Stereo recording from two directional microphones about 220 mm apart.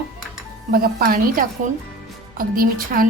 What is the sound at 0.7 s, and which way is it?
A woman's voice, 40° right (ahead or behind).